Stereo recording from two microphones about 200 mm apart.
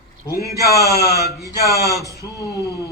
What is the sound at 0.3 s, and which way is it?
Speech, 15° right (ahead or behind).